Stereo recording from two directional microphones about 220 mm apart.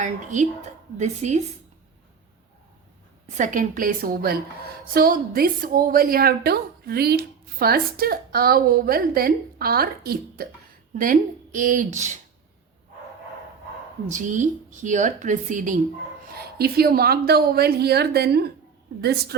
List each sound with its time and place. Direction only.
0.0 s speech: 35° right (ahead or behind)
3.2 s a woman's voice: 35° right (ahead or behind)
14.1 s a woman's voice: 35° right (ahead or behind)